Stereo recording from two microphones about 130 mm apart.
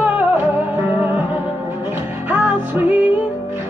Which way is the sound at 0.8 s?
15° right (ahead or behind).